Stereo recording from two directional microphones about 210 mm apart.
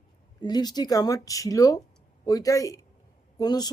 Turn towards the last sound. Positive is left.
turn(degrees=20)  # may be behind; listen again after turning